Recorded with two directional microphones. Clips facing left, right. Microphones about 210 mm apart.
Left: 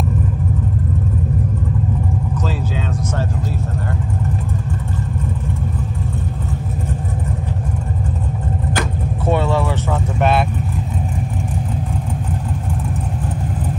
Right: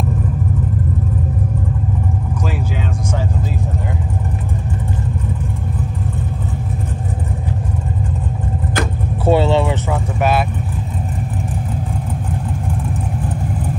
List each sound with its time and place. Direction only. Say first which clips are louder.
9.2 s vehicle: right 4 dB; 30° right (ahead or behind)